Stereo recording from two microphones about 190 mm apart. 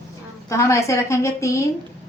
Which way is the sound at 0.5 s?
15° left (ahead or behind).